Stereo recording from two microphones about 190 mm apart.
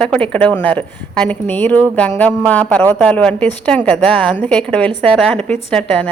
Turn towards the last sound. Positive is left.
turn(degrees=5)  # may be behind; listen again after turning